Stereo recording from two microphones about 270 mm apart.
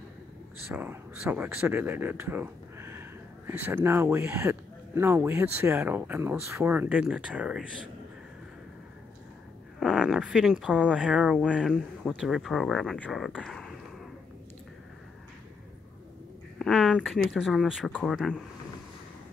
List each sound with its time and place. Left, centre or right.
0.7 s speech: centre
9.8 s speech: centre
16.5 s speech: centre